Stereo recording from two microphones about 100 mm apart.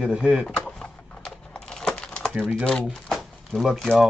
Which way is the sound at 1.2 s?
10° left (ahead or behind).